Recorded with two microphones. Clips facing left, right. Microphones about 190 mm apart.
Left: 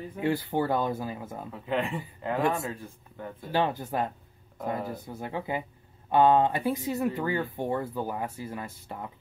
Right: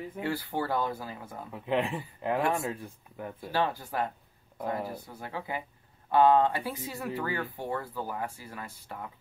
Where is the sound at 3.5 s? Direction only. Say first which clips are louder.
Left 3 dB; 20° left (ahead or behind).